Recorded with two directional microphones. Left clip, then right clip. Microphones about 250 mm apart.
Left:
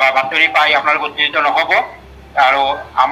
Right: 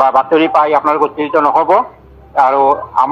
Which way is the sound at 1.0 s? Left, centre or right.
Centre.